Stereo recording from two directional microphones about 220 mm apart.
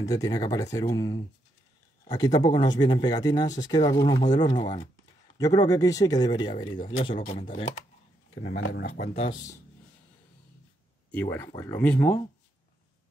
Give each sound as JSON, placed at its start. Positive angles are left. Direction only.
{"t": 0.0, "sound": "speech", "side_deg": 15}
{"t": 8.5, "sound": "speech", "side_deg": 50}
{"t": 9.1, "sound": "speech", "side_deg": 25}
{"t": 11.1, "sound": "speech", "side_deg": 10}